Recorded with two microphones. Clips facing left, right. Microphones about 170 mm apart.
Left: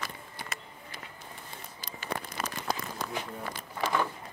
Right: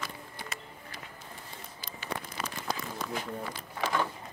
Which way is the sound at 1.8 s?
45° left (ahead or behind).